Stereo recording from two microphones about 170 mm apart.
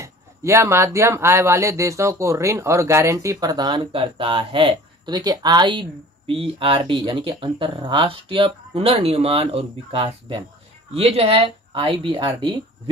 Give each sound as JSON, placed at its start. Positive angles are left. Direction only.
{"t": 0.0, "sound": "speech", "side_deg": -15}